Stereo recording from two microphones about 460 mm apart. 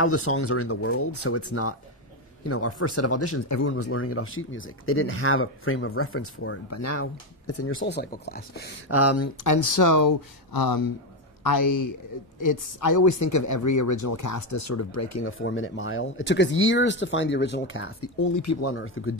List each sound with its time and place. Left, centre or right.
0.0 s a man's voice: left
18.3 s speech: left